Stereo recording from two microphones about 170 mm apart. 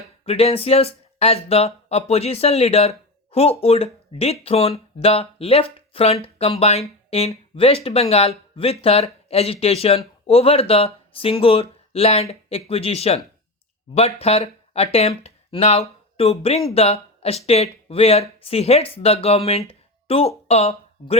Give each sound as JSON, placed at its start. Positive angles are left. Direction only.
{"t": 0.3, "sound": "speech", "side_deg": 35}